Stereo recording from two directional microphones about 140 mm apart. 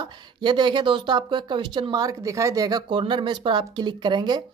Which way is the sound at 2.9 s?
35° right (ahead or behind).